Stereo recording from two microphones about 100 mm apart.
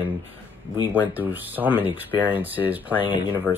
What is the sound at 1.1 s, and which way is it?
Speech, 20° right (ahead or behind).